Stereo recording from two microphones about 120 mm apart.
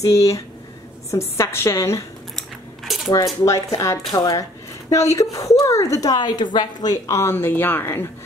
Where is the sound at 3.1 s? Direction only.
25° left (ahead or behind).